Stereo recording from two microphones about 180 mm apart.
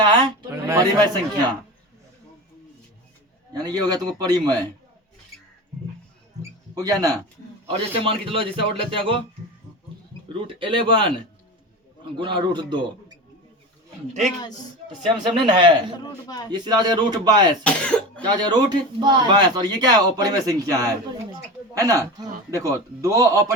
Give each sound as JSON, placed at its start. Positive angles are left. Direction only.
{"t": 0.0, "sound": "speech", "side_deg": -25}
{"t": 3.5, "sound": "speech", "side_deg": -20}
{"t": 6.7, "sound": "speech", "side_deg": -20}
{"t": 7.7, "sound": "speech", "side_deg": -30}
{"t": 10.4, "sound": "speech", "side_deg": -30}
{"t": 12.1, "sound": "speech", "side_deg": -25}
{"t": 14.1, "sound": "a woman's voice", "side_deg": -40}
{"t": 15.4, "sound": "speech", "side_deg": -25}
{"t": 16.2, "sound": "a man's voice", "side_deg": 20}
{"t": 16.5, "sound": "speech", "side_deg": -25}
{"t": 17.6, "sound": "speech", "side_deg": 5}
{"t": 18.2, "sound": "speech", "side_deg": -25}